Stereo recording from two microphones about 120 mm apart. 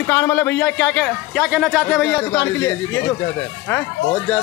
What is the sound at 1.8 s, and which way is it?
Speech, 15° left (ahead or behind).